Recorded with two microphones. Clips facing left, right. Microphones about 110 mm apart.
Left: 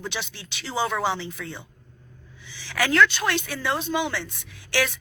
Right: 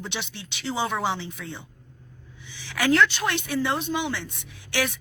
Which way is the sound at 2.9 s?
20° right (ahead or behind).